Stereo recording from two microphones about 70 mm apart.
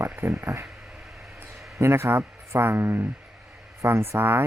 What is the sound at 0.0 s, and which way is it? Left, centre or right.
Speech, right.